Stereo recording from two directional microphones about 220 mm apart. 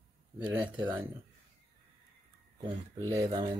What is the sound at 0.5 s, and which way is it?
Speech, 10° right (ahead or behind).